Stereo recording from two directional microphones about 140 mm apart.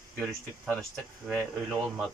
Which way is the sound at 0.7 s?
5° left (ahead or behind).